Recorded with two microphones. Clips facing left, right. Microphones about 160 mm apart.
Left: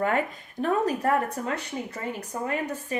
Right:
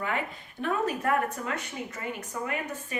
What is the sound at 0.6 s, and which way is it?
Speech, 40° left (ahead or behind).